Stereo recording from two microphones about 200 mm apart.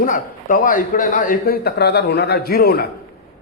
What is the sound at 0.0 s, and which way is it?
A man's voice, 40° left (ahead or behind).